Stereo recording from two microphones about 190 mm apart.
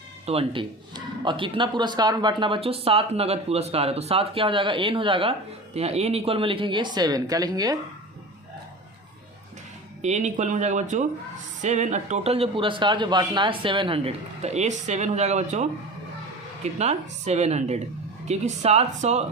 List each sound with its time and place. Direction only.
0.3 s a man's voice: 30° right (ahead or behind)
10.0 s a man's voice: 35° right (ahead or behind)
16.7 s a man's voice: 35° right (ahead or behind)